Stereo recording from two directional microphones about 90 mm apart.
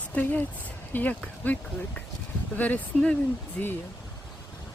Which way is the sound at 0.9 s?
20° left (ahead or behind).